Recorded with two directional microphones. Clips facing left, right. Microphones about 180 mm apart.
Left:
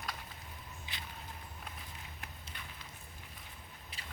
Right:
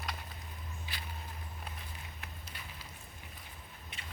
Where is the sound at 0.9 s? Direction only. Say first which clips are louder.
Right 1 dB; 20° left (ahead or behind).